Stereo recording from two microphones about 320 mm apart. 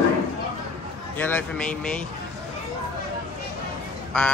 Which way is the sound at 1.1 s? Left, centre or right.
Centre.